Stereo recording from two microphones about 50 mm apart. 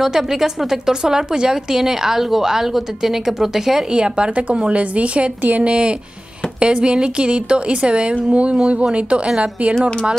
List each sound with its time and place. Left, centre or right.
0.0 s a woman's voice: centre
3.9 s a woman's voice: centre